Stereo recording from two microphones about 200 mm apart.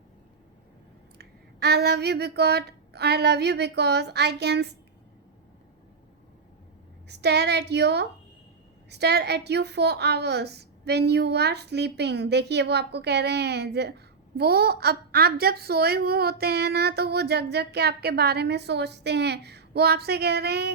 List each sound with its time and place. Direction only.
1.2 s a woman's voice: 55° right (ahead or behind)
7.1 s a woman's voice: 55° right (ahead or behind)